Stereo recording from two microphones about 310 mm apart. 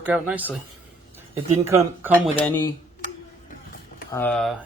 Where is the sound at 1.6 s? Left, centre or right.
Centre.